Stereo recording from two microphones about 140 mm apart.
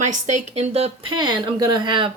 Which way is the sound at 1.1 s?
35° right (ahead or behind).